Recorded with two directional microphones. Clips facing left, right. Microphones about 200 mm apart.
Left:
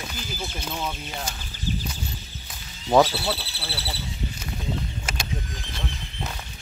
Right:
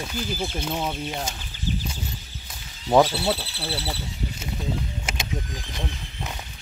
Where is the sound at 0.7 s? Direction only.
25° right (ahead or behind).